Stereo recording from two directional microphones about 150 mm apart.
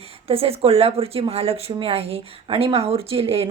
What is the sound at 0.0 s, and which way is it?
Speech, 40° right (ahead or behind).